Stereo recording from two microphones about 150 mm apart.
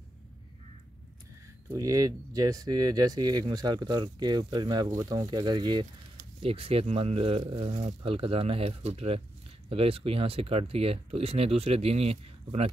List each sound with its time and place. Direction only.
1.7 s speech: 20° right (ahead or behind); by 12.7 s 40° right (ahead or behind)